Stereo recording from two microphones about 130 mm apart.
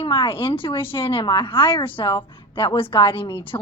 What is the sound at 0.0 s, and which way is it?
A woman's voice, 40° left (ahead or behind).